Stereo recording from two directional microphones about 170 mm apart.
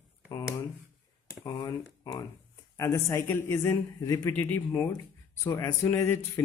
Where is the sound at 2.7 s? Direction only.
20° left (ahead or behind).